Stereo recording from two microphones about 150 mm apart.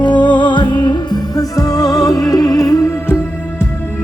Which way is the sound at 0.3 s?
30° left (ahead or behind).